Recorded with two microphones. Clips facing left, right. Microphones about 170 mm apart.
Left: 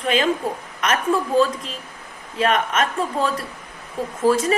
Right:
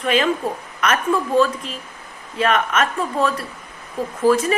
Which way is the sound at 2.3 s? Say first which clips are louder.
Right 1 dB; 35° left (ahead or behind).